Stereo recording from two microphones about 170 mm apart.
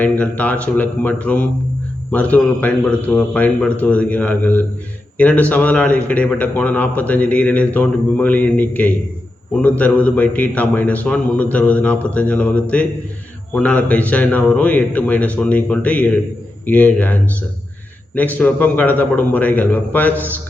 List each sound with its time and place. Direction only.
0.0 s a man's voice: 10° left (ahead or behind)